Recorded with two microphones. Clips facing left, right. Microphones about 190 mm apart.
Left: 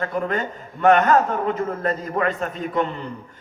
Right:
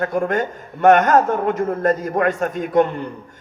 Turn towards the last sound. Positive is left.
turn(degrees=-50)  # may be behind; listen again after turning